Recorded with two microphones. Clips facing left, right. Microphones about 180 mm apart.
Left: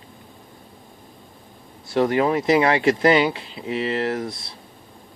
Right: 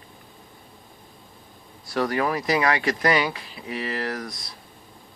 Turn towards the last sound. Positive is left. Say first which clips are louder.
# left 6 dB
turn(degrees=25)  # may be behind; listen again after turning